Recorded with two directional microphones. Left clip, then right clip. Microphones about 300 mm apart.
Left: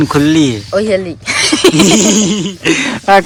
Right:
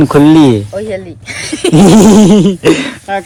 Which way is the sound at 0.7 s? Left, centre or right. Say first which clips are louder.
Left 6 dB; centre.